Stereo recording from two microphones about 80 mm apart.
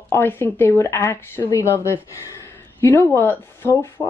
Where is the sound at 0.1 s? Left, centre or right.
Left.